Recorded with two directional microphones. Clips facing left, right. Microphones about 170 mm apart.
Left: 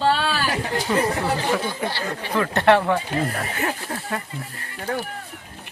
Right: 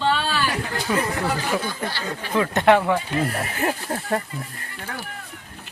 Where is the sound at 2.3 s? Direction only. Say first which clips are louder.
Even; 15° right (ahead or behind).